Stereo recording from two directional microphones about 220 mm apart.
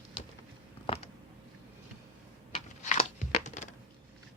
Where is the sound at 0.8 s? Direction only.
25° left (ahead or behind).